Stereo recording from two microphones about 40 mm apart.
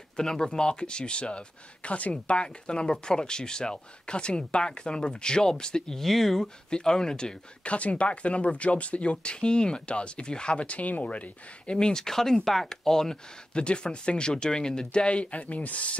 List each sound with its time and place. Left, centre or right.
0.2 s speech: centre
6.7 s speech: centre
7.6 s speech: left; by 13.2 s centre
13.6 s speech: left